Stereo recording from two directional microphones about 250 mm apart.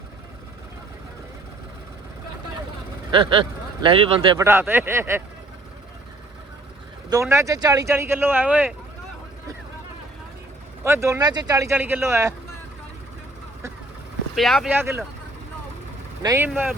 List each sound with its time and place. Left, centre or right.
3.1 s speech: centre
7.1 s speech: centre
10.8 s speech: centre
14.3 s speech: centre
16.2 s speech: centre